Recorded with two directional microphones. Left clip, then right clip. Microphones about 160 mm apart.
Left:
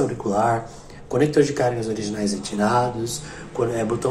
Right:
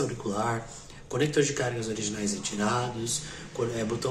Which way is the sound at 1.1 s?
Centre (ahead or behind).